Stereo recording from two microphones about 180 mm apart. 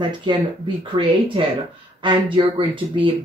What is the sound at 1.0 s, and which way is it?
Speech, 30° right (ahead or behind).